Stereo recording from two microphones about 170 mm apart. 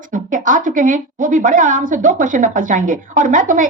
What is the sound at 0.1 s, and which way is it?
A woman's voice, 50° right (ahead or behind).